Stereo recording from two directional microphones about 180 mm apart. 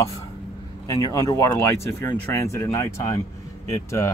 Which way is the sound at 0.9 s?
15° left (ahead or behind).